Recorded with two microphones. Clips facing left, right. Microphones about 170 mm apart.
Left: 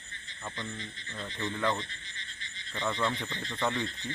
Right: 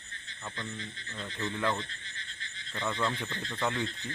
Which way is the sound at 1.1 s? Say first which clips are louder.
Even; centre (ahead or behind).